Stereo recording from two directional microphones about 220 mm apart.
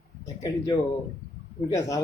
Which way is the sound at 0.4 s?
15° left (ahead or behind).